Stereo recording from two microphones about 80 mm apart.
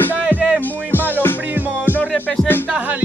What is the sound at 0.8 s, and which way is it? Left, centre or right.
Music, left.